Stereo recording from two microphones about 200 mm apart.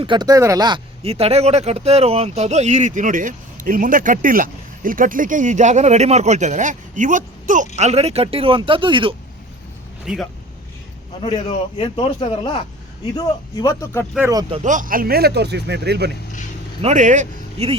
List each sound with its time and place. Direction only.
0.0 s speech: 20° right (ahead or behind)
10.1 s speech: 5° right (ahead or behind)
11.2 s a man's voice: 25° left (ahead or behind)
14.2 s speech: 15° right (ahead or behind)
14.5 s speech: 40° right (ahead or behind); by 16.1 s 55° right (ahead or behind)
16.8 s speech: 40° right (ahead or behind)